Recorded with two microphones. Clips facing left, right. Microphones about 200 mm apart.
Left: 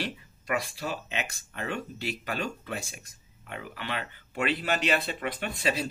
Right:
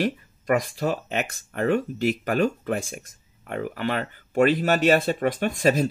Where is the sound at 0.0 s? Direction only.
45° right (ahead or behind).